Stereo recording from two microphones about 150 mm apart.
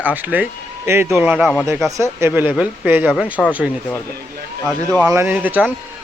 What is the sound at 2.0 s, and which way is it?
Speech, 15° right (ahead or behind).